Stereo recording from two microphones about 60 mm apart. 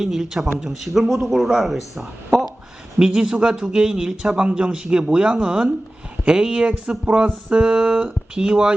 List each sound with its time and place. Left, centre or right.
0.0 s speech: centre